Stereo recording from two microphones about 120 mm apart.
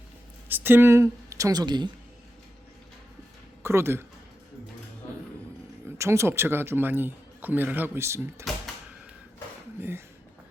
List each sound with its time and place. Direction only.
0.4 s speech: 15° right (ahead or behind); by 1.9 s 35° right (ahead or behind)
3.6 s speech: 20° right (ahead or behind)
6.0 s a man's voice: 20° right (ahead or behind)